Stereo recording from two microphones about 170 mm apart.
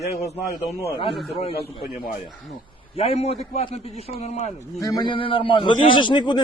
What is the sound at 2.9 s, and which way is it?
A man's voice, 35° left (ahead or behind).